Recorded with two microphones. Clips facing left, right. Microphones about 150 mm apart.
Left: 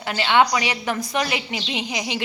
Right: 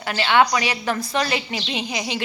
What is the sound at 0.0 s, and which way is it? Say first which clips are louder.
A woman's voice: even; 20° left (ahead or behind).